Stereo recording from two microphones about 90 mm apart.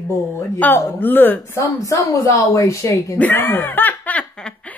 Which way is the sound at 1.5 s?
40° left (ahead or behind).